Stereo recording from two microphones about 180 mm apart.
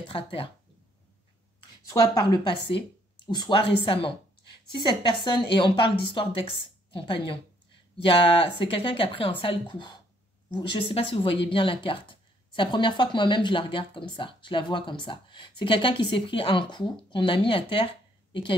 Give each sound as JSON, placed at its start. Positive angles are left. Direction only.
{"t": 0.1, "sound": "speech", "side_deg": 30}
{"t": 1.9, "sound": "speech", "side_deg": 25}